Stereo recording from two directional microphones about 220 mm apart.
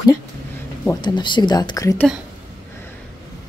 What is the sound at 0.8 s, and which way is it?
Speech, 20° left (ahead or behind).